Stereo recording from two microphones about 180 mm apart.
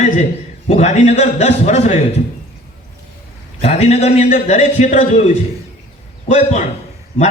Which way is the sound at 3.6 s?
35° left (ahead or behind).